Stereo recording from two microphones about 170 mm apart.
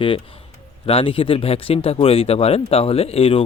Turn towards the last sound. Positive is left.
turn(degrees=35)  # may be behind; listen again after turning